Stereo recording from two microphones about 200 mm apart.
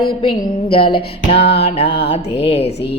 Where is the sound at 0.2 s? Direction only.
25° left (ahead or behind).